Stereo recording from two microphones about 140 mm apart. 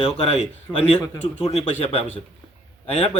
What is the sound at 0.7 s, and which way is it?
A man's voice, 40° left (ahead or behind).